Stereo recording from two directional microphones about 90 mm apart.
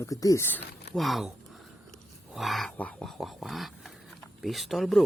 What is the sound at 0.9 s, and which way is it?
Speech, centre (ahead or behind).